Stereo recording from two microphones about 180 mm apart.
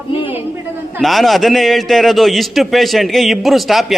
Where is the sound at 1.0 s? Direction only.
Centre (ahead or behind).